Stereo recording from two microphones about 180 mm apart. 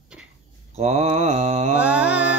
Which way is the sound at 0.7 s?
35° right (ahead or behind).